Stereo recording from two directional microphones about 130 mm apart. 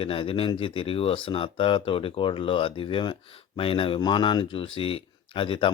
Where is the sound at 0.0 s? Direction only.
45° left (ahead or behind).